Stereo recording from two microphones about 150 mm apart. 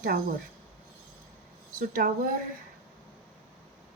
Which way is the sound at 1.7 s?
65° right (ahead or behind).